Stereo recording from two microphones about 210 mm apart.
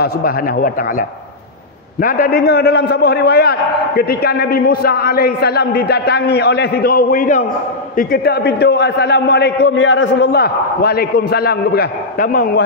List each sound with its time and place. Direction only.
0.0 s a man's voice: 40° left (ahead or behind)